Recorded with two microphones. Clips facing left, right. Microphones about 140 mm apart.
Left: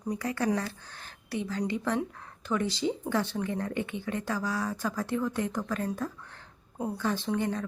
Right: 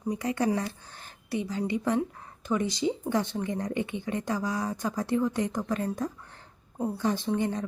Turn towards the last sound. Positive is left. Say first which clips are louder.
# right 2 dB
turn(degrees=-15)  # may be behind; listen again after turning